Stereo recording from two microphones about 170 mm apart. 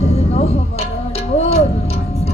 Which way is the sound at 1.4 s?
35° left (ahead or behind).